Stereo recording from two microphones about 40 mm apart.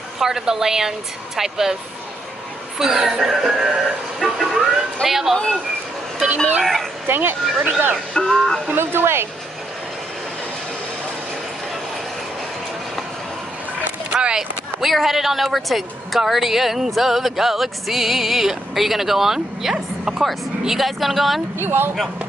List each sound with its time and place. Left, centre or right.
0.2 s speech: centre
2.8 s speech: centre
4.2 s vehicle: centre
5.0 s speech: centre
6.2 s speech: right
6.6 s speech: centre
7.1 s speech: right
8.1 s speech: centre
8.7 s speech: right
14.8 s speech: centre
21.6 s speech: right